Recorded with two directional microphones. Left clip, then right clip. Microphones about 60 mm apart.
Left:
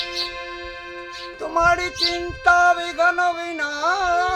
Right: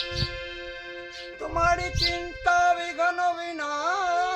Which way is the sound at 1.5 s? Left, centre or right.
Left.